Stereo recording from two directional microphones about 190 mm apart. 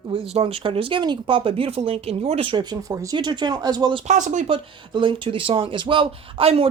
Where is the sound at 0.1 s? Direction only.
30° right (ahead or behind).